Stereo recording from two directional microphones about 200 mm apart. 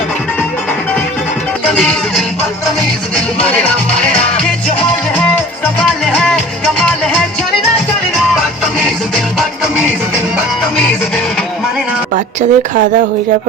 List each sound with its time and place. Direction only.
1.7 s music: centre (ahead or behind)
6.1 s music: centre (ahead or behind)
12.1 s speech: 40° right (ahead or behind)